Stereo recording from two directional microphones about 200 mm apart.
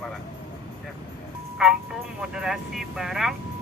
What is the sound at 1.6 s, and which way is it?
Speech, 5° right (ahead or behind).